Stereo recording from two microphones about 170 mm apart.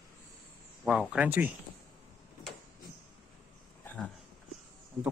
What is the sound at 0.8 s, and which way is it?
Speech, 5° right (ahead or behind).